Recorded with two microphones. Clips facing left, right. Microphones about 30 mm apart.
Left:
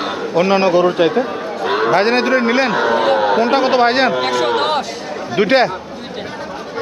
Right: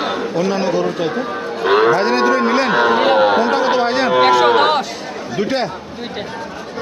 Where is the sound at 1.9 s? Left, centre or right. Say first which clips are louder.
Left 1 dB; left.